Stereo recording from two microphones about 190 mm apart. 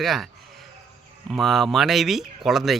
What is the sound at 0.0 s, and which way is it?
Speech, centre (ahead or behind).